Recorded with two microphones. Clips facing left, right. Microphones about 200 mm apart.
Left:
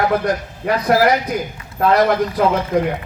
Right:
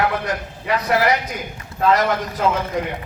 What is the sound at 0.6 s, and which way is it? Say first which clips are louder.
Speech: left 3 dB; 50° left (ahead or behind).